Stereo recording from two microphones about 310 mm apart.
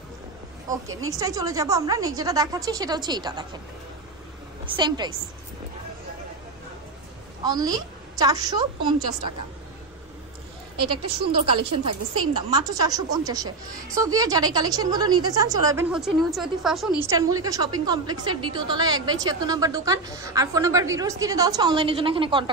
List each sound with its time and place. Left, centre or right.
1.0 s a woman's voice: centre
4.7 s a woman's voice: centre
7.4 s a woman's voice: centre
11.1 s a woman's voice: centre